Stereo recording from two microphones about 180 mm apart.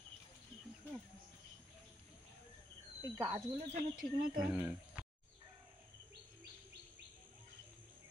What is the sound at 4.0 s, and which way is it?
Speech, 55° right (ahead or behind).